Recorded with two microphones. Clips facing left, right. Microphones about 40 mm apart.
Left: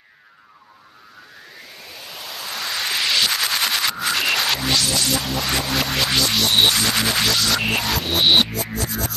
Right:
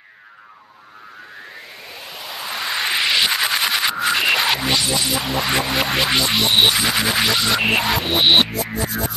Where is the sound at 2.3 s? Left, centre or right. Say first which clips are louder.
Right 3 dB; centre.